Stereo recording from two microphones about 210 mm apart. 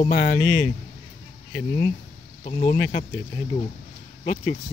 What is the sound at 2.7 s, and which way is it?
Speech, 45° left (ahead or behind).